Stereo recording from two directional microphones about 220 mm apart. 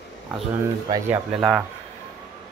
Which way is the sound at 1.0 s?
10° right (ahead or behind).